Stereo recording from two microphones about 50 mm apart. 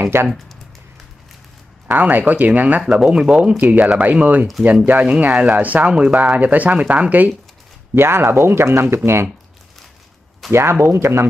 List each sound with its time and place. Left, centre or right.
0.0 s speech: right
2.0 s speech: right
2.9 s speech: centre
3.5 s speech: right
7.9 s speech: right
10.5 s speech: right